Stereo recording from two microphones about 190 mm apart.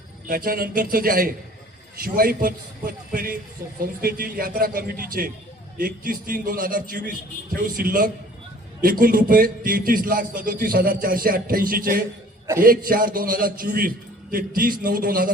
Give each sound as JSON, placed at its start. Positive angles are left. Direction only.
{"t": 0.3, "sound": "a man's voice", "side_deg": -50}